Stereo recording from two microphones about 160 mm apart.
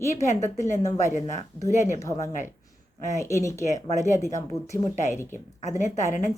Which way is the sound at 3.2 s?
20° left (ahead or behind).